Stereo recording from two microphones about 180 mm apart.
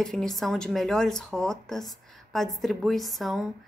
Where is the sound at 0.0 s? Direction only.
Centre (ahead or behind).